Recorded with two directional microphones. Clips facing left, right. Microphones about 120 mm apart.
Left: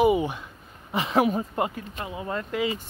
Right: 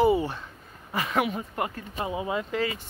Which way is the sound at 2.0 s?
25° right (ahead or behind).